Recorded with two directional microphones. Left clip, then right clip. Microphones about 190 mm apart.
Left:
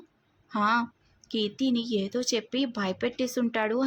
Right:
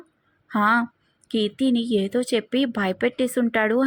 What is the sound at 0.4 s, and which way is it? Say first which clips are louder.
Speech: right 5 dB; 20° right (ahead or behind).